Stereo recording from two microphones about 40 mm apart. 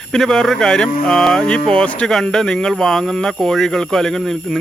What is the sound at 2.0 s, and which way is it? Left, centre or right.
Speech, centre.